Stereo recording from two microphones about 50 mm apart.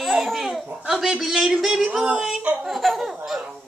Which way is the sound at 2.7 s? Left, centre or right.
Centre.